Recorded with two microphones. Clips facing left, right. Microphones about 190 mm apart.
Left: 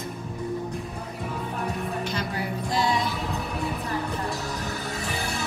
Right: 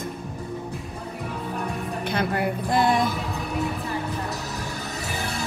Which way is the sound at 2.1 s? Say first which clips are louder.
Right 5 dB; 55° right (ahead or behind).